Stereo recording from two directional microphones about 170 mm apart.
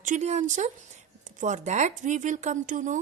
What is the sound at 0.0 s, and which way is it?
Speech, 45° right (ahead or behind).